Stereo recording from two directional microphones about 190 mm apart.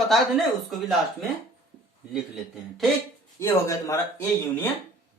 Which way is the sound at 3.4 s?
15° left (ahead or behind).